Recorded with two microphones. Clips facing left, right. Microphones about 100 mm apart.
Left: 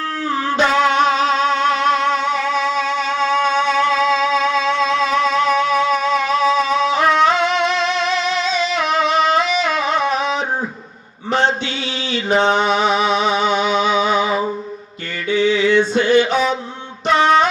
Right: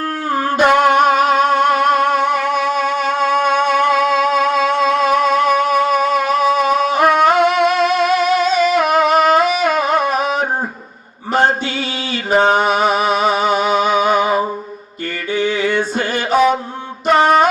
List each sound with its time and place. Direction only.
0.3 s music: 45° right (ahead or behind)
11.3 s mantra: 45° right (ahead or behind)
12.4 s music: 45° right (ahead or behind)
15.3 s mantra: 45° right (ahead or behind)
17.1 s a sound: 45° right (ahead or behind)